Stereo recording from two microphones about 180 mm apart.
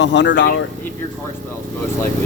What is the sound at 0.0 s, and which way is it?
Speech, 75° left (ahead or behind).